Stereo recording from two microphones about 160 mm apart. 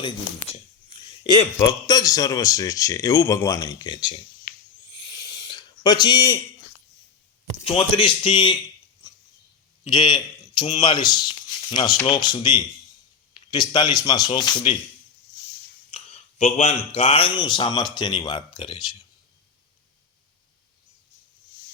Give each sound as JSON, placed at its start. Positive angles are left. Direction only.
{"t": 0.0, "sound": "speech", "side_deg": 35}
{"t": 1.5, "sound": "speech", "side_deg": 25}
{"t": 4.5, "sound": "a sound", "side_deg": 70}
{"t": 5.1, "sound": "spray", "side_deg": 25}
{"t": 7.6, "sound": "a man's voice", "side_deg": 30}
{"t": 9.8, "sound": "speech", "side_deg": 30}
{"t": 15.9, "sound": "a sound", "side_deg": 35}
{"t": 16.4, "sound": "speech", "side_deg": 45}